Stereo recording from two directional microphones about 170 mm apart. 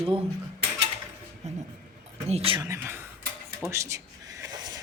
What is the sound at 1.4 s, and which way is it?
Speech, 40° right (ahead or behind).